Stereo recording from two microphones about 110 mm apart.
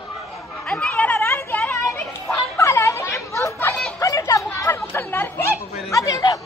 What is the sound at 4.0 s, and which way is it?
Chatter, 30° left (ahead or behind).